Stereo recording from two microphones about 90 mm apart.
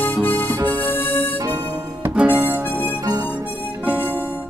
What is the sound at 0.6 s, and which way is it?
Music, 20° left (ahead or behind).